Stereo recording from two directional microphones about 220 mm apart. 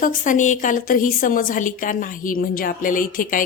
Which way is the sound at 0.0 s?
35° left (ahead or behind).